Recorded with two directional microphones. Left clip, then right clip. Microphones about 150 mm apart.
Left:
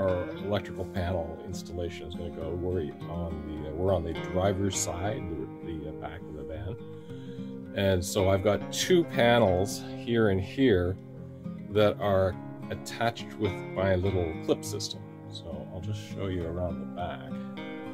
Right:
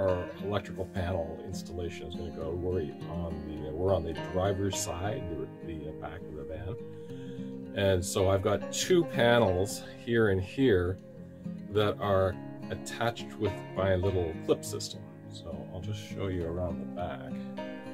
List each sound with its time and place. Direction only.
0.5 s speech: 15° left (ahead or behind)
7.7 s speech: 15° left (ahead or behind)
16.2 s speech: 10° left (ahead or behind)